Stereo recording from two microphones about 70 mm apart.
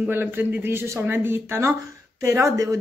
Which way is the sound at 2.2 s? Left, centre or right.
Right.